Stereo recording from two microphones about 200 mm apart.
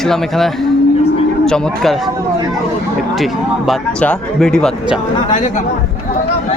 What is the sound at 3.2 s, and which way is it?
Speech, centre (ahead or behind).